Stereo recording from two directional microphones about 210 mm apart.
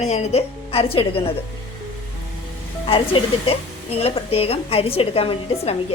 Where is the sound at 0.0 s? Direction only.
30° left (ahead or behind).